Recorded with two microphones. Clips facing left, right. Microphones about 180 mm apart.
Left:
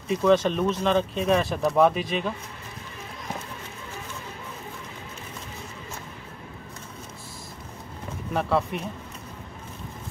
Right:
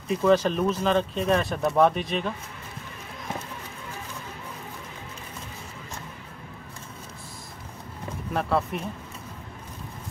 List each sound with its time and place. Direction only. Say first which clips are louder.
0.1 s speech: even; centre (ahead or behind)
8.3 s speech: left 1 dB; centre (ahead or behind)